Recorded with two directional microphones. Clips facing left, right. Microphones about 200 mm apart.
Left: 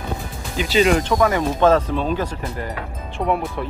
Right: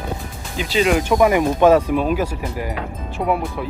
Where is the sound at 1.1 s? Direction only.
15° right (ahead or behind).